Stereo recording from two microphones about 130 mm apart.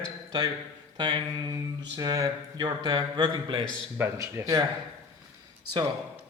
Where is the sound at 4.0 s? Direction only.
20° right (ahead or behind).